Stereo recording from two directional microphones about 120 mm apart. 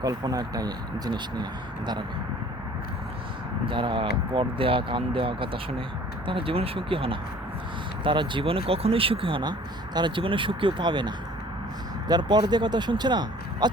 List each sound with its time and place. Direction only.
0.0 s speech: 30° right (ahead or behind)
3.7 s speech: 45° right (ahead or behind)